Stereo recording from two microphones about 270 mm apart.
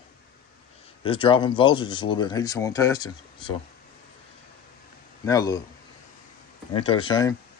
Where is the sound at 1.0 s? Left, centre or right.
Centre.